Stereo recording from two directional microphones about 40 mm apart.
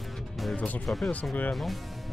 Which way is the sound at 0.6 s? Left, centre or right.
Left.